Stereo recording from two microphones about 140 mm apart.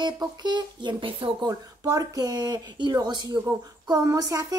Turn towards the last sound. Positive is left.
turn(degrees=-25)  # may be behind; listen again after turning